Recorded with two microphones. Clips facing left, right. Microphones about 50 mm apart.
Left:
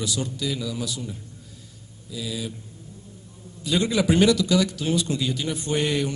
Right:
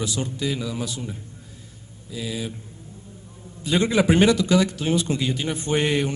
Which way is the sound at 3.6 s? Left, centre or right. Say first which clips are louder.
Right 2 dB; right.